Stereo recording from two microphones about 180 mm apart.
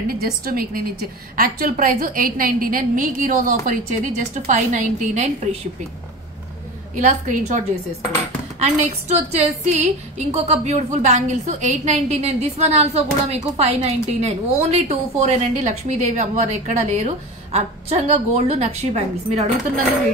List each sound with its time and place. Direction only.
0.2 s a woman's voice: 55° right (ahead or behind)
7.0 s a woman's voice: 45° right (ahead or behind)